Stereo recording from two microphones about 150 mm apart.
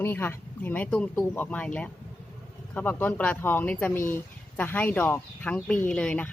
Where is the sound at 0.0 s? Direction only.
15° left (ahead or behind).